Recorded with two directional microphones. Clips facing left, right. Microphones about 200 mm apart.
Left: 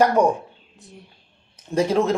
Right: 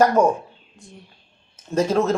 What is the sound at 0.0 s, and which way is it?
Speech, 15° left (ahead or behind).